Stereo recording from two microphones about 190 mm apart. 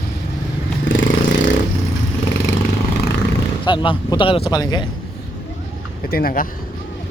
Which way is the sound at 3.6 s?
25° left (ahead or behind).